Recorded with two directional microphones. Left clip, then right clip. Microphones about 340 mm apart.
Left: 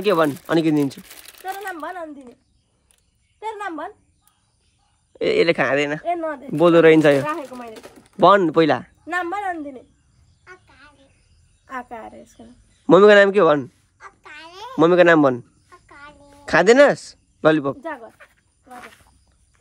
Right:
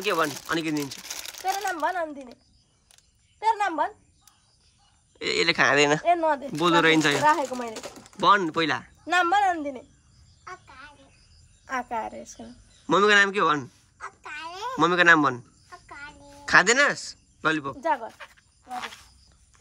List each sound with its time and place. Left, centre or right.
0.0 s speech: centre
1.4 s a sound: centre
3.3 s a woman's voice: centre
5.2 s speech: centre
6.6 s speech: centre
7.2 s speech: right
8.2 s speech: centre
10.4 s a sound: centre
11.6 s a woman's voice: centre
12.8 s speech: centre
15.9 s a sound: centre
17.7 s speech: centre